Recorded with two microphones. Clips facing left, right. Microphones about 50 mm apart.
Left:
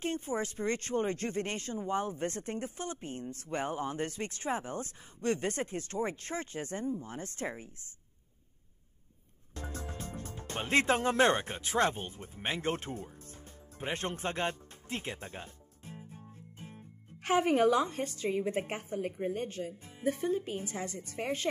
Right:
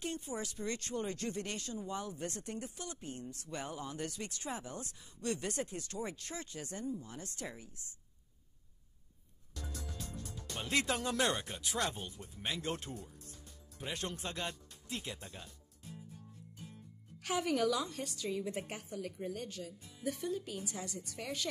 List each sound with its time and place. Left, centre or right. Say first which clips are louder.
0.0 s speech: left 6 dB; left
9.5 s speech: left 5 dB; left